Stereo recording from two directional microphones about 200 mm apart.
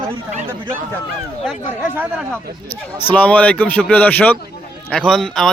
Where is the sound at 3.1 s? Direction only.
10° left (ahead or behind).